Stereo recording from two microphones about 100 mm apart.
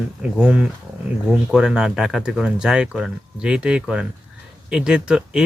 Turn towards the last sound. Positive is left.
turn(degrees=-10)  # may be behind; listen again after turning